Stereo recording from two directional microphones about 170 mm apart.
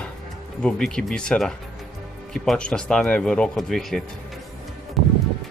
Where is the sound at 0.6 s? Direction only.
5° left (ahead or behind).